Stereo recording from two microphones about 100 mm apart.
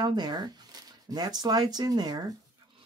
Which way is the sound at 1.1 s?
45° right (ahead or behind).